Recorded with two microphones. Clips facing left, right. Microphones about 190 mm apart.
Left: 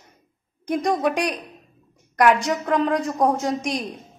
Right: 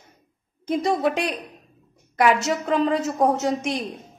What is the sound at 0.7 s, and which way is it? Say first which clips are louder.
A woman's voice: even; 5° right (ahead or behind).